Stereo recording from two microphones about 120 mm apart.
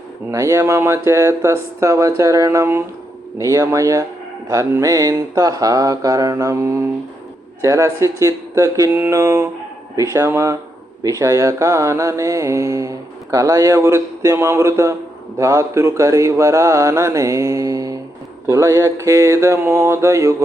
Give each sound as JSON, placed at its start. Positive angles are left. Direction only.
{"t": 0.3, "sound": "mantra", "side_deg": -25}